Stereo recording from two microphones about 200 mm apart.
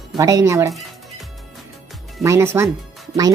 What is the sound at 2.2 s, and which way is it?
Speech, 15° right (ahead or behind).